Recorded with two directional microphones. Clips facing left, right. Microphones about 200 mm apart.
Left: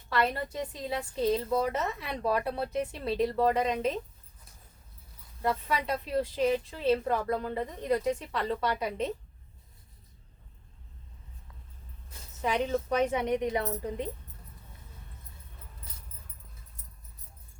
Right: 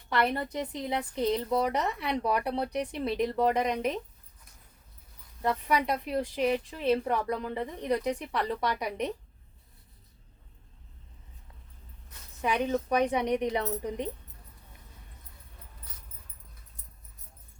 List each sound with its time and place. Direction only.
0.1 s a woman's voice: 20° right (ahead or behind)
5.4 s a woman's voice: 15° right (ahead or behind)
12.4 s a woman's voice: 15° right (ahead or behind)